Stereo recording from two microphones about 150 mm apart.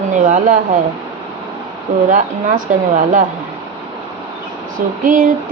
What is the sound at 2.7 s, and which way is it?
Mantra, 60° right (ahead or behind).